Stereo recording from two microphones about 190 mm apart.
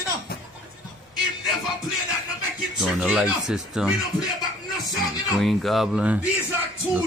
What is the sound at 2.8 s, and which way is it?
Speech, 5° right (ahead or behind).